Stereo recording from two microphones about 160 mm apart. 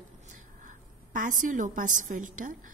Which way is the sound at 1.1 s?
55° right (ahead or behind).